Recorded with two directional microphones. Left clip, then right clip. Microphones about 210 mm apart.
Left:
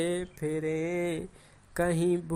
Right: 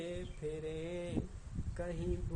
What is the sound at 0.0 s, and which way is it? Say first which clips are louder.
Speech: left 11 dB; 45° left (ahead or behind).